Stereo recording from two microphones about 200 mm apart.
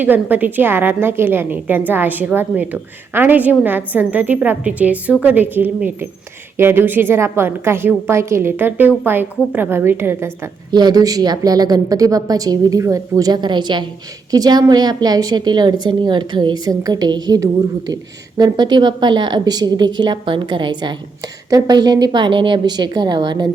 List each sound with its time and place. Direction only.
0.0 s a woman's voice: 10° right (ahead or behind)